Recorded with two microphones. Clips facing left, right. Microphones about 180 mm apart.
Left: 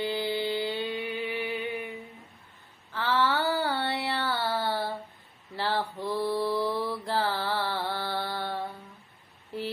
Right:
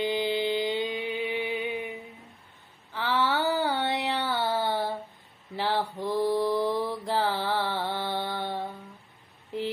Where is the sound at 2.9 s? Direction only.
15° right (ahead or behind).